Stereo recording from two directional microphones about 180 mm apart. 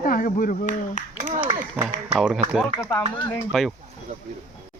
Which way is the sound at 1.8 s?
5° right (ahead or behind).